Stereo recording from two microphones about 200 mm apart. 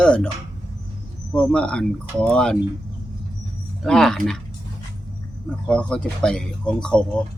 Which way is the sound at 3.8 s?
Centre (ahead or behind).